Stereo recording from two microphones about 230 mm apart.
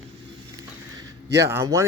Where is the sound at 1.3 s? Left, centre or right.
Centre.